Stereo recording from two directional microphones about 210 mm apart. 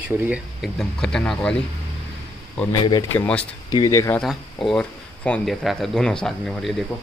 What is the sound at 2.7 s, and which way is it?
Speech, 20° left (ahead or behind).